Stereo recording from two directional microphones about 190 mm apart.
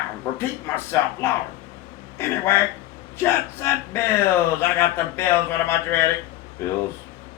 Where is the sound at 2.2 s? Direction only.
15° left (ahead or behind).